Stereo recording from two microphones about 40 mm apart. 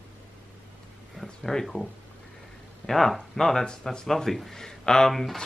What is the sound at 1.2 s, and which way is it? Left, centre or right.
Speech, centre.